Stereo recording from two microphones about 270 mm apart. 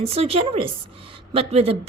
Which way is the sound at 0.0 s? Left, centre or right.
Right.